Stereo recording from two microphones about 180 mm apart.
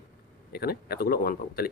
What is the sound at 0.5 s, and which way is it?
Speech, 60° left (ahead or behind).